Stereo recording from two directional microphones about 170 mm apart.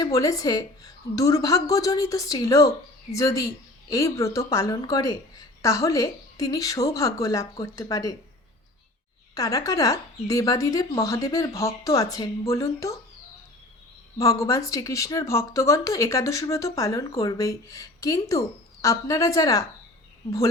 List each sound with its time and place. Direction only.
0.0 s speech: 20° left (ahead or behind)
9.3 s speech: 20° left (ahead or behind)
14.2 s speech: 20° left (ahead or behind)